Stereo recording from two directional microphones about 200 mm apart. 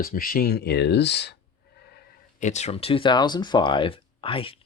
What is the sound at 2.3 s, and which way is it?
Speech, 35° left (ahead or behind).